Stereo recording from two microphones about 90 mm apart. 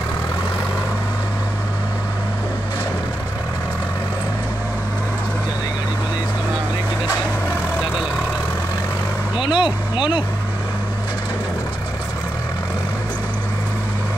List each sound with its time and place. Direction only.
9.4 s vehicle: 65° left (ahead or behind)